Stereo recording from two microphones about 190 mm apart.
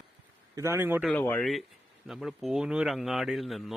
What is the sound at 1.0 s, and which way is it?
Speech, 10° left (ahead or behind).